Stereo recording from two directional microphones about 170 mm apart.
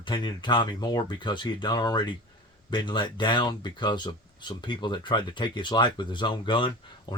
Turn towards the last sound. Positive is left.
turn(degrees=25)  # may be behind; listen again after turning